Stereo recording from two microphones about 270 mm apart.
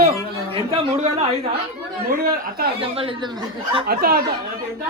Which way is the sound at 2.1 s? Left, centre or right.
Right.